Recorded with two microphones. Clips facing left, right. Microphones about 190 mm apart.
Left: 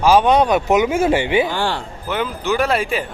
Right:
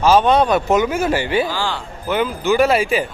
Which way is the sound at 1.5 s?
60° left (ahead or behind).